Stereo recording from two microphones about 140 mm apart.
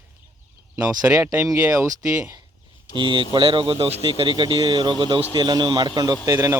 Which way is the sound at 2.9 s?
35° right (ahead or behind).